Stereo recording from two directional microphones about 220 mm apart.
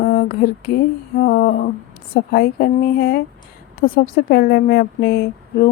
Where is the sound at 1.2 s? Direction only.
45° left (ahead or behind).